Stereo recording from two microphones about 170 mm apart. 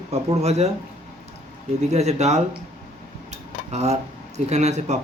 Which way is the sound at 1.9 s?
40° right (ahead or behind).